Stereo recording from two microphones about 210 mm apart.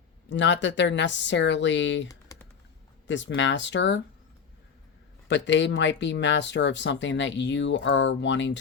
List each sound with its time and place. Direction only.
0.3 s speech: 60° left (ahead or behind)
2.0 s computer keyboard: 15° left (ahead or behind)
3.1 s speech: 60° left (ahead or behind)
5.3 s speech: 55° left (ahead or behind)